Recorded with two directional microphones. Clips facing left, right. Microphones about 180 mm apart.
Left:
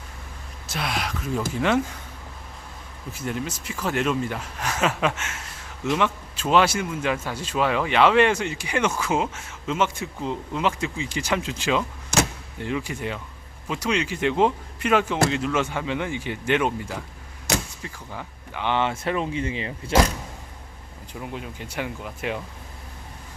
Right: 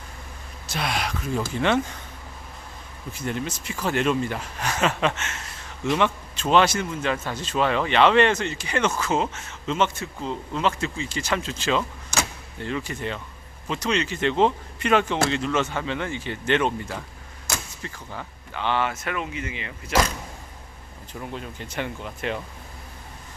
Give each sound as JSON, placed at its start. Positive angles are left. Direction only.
{"t": 0.7, "sound": "speech", "side_deg": 0}
{"t": 3.1, "sound": "a man's voice", "side_deg": 5}
{"t": 21.1, "sound": "a man's voice", "side_deg": 10}